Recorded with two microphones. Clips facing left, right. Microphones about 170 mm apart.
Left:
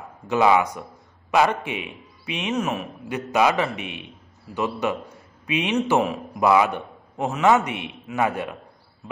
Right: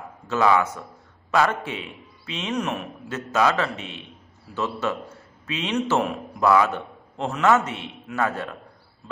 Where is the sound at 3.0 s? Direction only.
15° left (ahead or behind).